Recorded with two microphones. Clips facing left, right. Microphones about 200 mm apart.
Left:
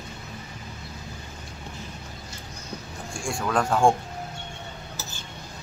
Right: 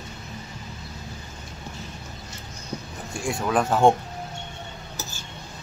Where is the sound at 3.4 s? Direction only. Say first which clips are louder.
Right 2 dB; 15° right (ahead or behind).